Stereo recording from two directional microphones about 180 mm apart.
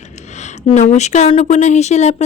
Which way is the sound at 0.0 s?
40° left (ahead or behind).